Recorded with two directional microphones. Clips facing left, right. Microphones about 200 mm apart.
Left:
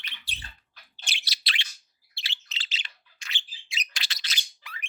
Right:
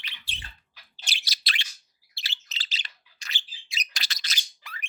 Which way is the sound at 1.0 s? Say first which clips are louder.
Even; 40° right (ahead or behind).